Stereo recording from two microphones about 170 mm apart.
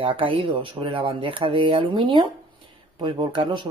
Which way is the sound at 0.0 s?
30° right (ahead or behind).